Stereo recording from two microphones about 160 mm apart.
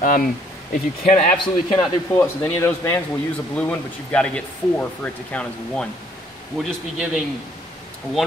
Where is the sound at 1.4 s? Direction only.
30° left (ahead or behind).